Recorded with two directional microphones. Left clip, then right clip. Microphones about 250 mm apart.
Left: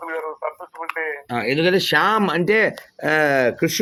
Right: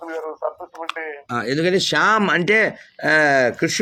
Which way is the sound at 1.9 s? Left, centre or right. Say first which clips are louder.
Right 1 dB; centre.